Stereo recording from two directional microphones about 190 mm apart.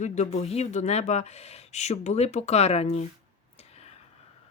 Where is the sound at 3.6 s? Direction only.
35° left (ahead or behind).